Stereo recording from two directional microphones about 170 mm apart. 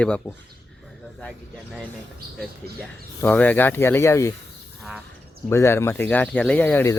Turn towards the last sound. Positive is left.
turn(degrees=10)  # may be behind; listen again after turning